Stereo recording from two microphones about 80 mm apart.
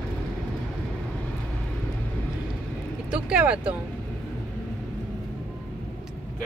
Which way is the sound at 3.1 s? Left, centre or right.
Centre.